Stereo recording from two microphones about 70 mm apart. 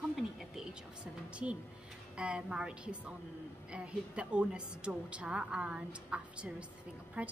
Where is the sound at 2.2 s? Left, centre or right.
Centre.